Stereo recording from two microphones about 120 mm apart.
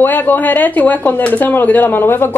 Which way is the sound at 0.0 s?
15° left (ahead or behind).